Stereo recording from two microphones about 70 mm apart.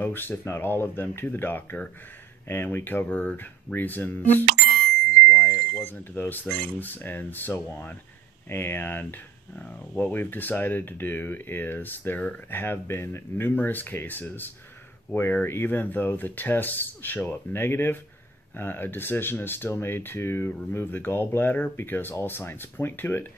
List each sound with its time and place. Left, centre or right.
0.0 s speech: left
5.3 s a sound: left
6.6 s speech: left